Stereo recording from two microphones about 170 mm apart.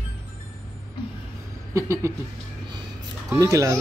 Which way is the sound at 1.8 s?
15° right (ahead or behind).